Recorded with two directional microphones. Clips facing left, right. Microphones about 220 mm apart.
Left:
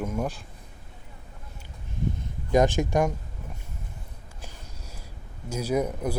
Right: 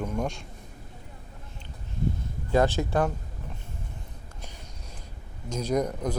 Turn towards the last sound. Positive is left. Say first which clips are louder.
# left 1 dB
turn(degrees=10)  # may be behind; listen again after turning